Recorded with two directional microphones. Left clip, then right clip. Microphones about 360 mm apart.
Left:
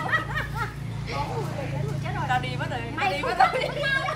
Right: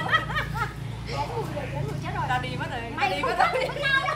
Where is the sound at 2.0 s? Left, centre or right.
Centre.